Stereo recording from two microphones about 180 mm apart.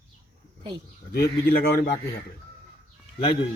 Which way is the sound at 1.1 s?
60° left (ahead or behind).